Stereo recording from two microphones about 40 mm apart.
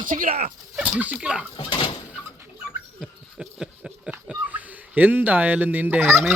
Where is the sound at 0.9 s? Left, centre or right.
Right.